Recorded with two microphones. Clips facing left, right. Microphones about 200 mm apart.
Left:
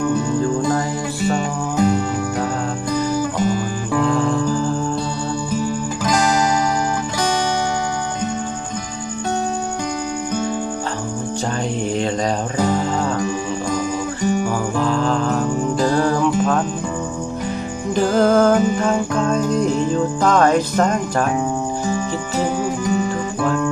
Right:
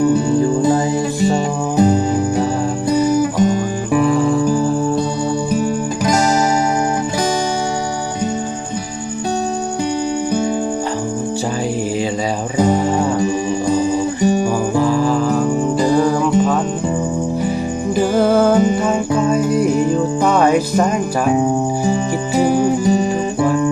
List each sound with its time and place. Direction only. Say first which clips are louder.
1.3 s music: right 4 dB; 35° right (ahead or behind)
3.4 s guitar: right 4 dB; 20° right (ahead or behind)
4.0 s music: right 3 dB; 5° right (ahead or behind)
5.5 s music: right 4 dB; 15° right (ahead or behind)
12.5 s music: right 6 dB; 15° right (ahead or behind)
14.8 s music: right 3 dB; 10° right (ahead or behind)
17.9 s music: even; 10° right (ahead or behind)
22.5 s music: right 6 dB; 30° right (ahead or behind)
23.4 s music: right 4 dB; 15° right (ahead or behind)